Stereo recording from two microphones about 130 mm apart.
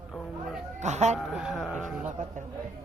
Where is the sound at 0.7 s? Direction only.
60° right (ahead or behind).